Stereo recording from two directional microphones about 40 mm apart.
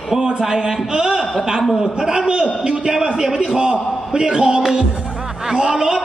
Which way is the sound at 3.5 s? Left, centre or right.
Right.